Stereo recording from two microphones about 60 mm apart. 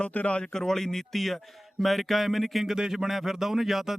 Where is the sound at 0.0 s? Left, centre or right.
Left.